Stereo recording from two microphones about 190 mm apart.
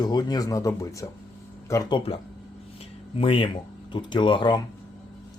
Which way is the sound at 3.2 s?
30° left (ahead or behind).